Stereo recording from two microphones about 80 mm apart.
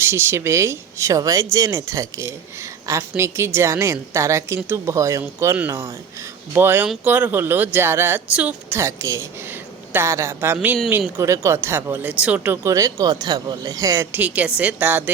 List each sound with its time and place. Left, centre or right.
0.0 s speech: right
8.3 s speech: centre
8.7 s speech: right
11.2 s speech: right
11.9 s speech: centre
12.5 s speech: right
14.1 s speech: centre